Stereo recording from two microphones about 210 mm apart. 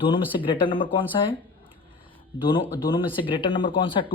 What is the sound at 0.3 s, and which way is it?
Speech, 25° left (ahead or behind).